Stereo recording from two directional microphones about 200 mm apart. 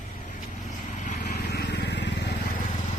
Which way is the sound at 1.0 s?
50° left (ahead or behind).